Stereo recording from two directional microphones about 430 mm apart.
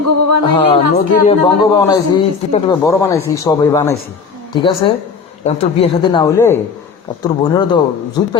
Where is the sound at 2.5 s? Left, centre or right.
Centre.